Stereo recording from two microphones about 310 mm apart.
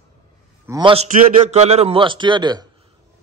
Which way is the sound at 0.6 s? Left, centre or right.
Centre.